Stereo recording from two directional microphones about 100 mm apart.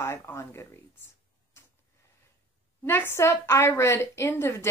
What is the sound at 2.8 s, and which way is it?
Speech, 25° left (ahead or behind).